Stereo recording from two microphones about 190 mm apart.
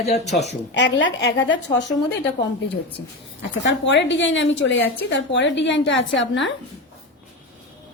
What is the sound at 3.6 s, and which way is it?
A woman's voice, 70° left (ahead or behind).